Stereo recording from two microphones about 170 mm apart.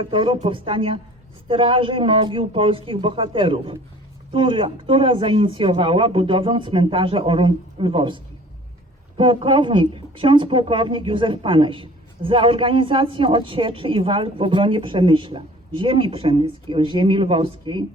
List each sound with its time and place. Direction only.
0.0 s speech: 30° right (ahead or behind)